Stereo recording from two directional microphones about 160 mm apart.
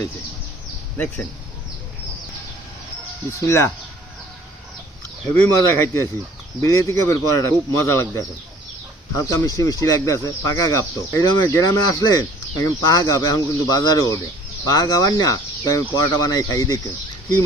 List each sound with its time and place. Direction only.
0.9 s speech: 10° left (ahead or behind)
3.4 s speech: 20° left (ahead or behind)
5.5 s speech: 15° left (ahead or behind)